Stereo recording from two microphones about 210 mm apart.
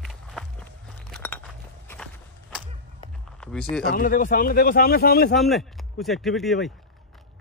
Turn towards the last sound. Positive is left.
turn(degrees=0)  # may be behind; listen again after turning